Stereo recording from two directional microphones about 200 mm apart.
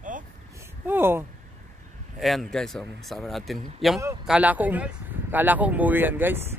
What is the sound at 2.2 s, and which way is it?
A man's voice, centre (ahead or behind).